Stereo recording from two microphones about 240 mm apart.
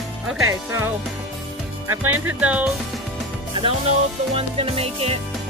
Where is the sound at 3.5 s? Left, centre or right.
Right.